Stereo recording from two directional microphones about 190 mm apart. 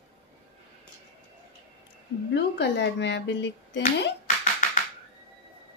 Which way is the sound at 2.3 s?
65° left (ahead or behind).